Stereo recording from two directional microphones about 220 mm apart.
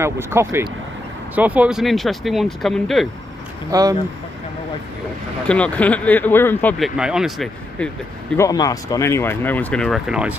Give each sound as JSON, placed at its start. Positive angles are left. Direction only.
{"t": 0.0, "sound": "speech", "side_deg": -10}
{"t": 3.7, "sound": "speech", "side_deg": -15}
{"t": 5.5, "sound": "speech", "side_deg": 5}
{"t": 8.4, "sound": "speech", "side_deg": 15}